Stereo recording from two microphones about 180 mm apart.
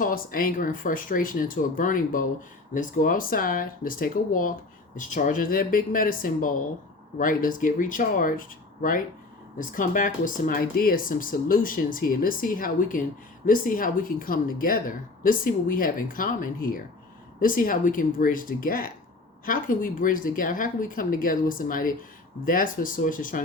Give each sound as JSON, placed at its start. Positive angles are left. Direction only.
{"t": 0.0, "sound": "speech", "side_deg": 50}